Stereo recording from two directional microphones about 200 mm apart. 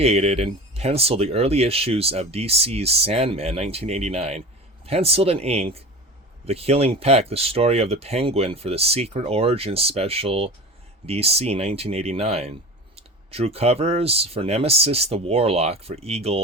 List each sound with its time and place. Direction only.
0.0 s speech: 30° right (ahead or behind)